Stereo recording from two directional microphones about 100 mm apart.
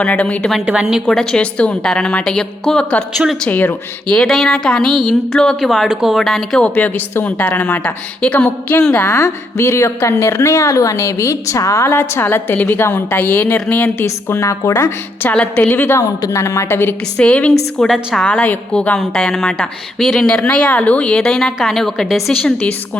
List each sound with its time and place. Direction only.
0.0 s a woman's voice: 15° left (ahead or behind)
0.6 s a woman's voice: 10° right (ahead or behind)
1.0 s a woman's voice: 5° left (ahead or behind)
3.4 s a woman's voice: 15° left (ahead or behind)
4.1 s a woman's voice: 5° left (ahead or behind)
6.7 s a woman's voice: 15° left (ahead or behind)
9.0 s a woman's voice: 25° left (ahead or behind)
15.3 s a woman's voice: 15° left (ahead or behind)
17.2 s a woman's voice: 10° left (ahead or behind)